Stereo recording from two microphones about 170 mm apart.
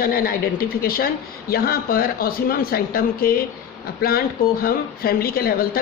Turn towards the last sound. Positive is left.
turn(degrees=60)  # may be behind; listen again after turning